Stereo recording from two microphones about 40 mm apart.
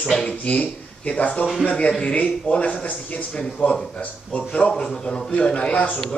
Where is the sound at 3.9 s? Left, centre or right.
Left.